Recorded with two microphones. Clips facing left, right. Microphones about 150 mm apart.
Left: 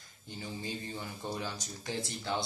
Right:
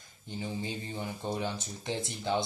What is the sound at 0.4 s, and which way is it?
Speech, 20° right (ahead or behind).